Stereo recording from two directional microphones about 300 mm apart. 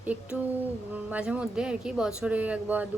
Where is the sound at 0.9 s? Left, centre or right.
Centre.